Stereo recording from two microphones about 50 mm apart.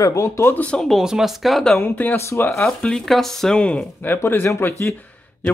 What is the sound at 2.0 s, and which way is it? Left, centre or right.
Speech, left.